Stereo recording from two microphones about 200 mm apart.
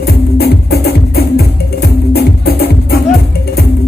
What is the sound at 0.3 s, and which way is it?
Music, 55° left (ahead or behind).